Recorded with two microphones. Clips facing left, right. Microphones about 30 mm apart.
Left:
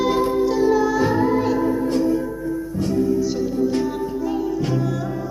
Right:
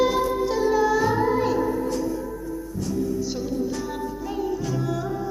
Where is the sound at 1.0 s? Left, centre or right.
Centre.